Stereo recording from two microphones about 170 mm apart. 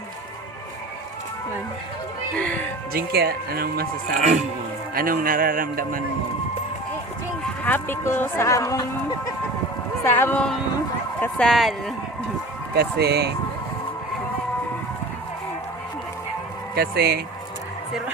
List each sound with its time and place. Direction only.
2.4 s speech: 10° left (ahead or behind)
2.9 s speech: 65° right (ahead or behind)
4.2 s speech: 45° right (ahead or behind)
4.9 s speech: 55° right (ahead or behind)
7.6 s speech: 10° left (ahead or behind)
10.0 s speech: 15° left (ahead or behind)
12.7 s speech: 70° right (ahead or behind)
16.7 s speech: 70° right (ahead or behind)